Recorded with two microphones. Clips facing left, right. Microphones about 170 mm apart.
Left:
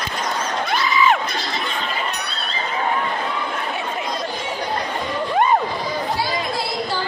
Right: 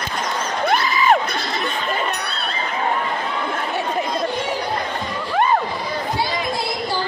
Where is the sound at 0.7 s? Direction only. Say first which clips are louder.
Right 1 dB; 50° right (ahead or behind).